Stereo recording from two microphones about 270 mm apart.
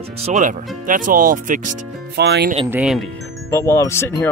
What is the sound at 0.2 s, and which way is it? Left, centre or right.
Speech, right.